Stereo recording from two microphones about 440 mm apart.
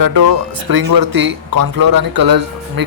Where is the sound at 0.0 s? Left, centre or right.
Right.